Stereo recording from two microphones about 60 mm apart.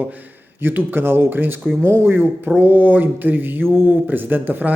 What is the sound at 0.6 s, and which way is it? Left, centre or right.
A man's voice, right.